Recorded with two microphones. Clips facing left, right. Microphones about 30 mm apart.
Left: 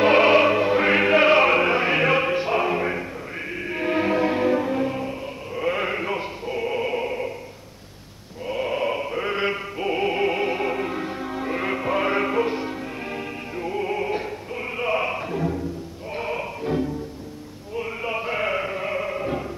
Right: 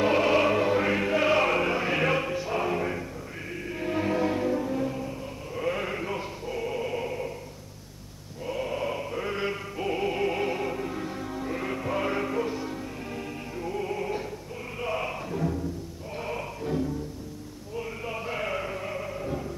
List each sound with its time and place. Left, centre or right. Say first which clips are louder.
0.0 s music: left 7 dB; left
0.5 s music: left 4 dB; left
0.8 s music: left 7 dB; left
2.2 s music: left 7 dB; left
2.6 s a sound: left 5 dB; left
3.6 s music: left 6 dB; left
5.6 s a sound: left 5 dB; left
8.5 s chant: left 6 dB; left
14.8 s music: left 7 dB; left